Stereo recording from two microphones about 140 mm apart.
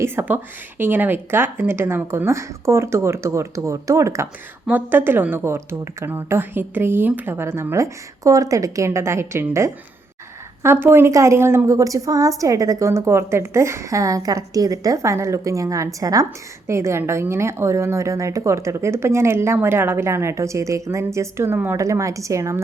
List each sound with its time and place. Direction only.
0.0 s a woman's voice: 15° right (ahead or behind)